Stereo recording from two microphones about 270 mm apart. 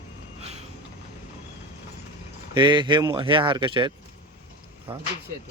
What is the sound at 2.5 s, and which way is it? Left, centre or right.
Speech, centre.